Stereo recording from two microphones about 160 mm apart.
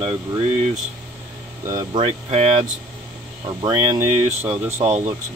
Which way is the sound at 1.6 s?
20° right (ahead or behind).